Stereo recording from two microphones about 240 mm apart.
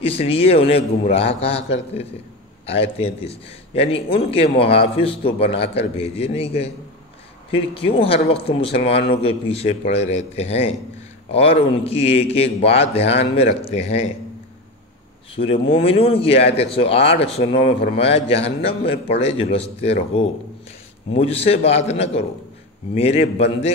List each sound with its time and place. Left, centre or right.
0.0 s a man's voice: left
15.3 s a man's voice: left